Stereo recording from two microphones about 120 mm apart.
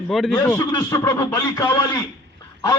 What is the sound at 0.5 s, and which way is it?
A man's voice, 30° left (ahead or behind).